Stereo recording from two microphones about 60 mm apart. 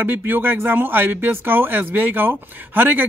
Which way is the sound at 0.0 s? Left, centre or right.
Right.